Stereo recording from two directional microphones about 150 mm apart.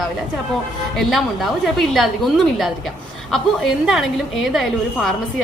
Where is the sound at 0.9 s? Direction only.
Centre (ahead or behind).